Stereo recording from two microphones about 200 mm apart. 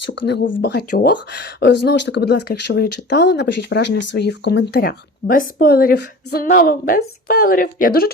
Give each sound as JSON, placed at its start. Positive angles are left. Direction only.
{"t": 0.0, "sound": "speech", "side_deg": 60}